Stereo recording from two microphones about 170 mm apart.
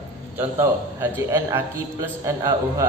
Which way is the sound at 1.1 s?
15° right (ahead or behind).